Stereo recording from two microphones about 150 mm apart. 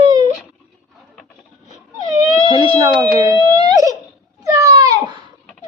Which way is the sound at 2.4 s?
35° right (ahead or behind).